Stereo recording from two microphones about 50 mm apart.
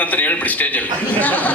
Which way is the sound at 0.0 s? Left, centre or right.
Left.